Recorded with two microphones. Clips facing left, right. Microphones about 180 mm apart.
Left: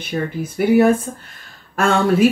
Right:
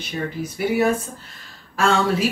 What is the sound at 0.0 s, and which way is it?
Speech, 50° left (ahead or behind).